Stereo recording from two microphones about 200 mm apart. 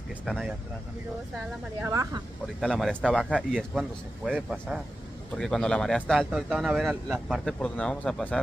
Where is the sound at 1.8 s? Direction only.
15° right (ahead or behind).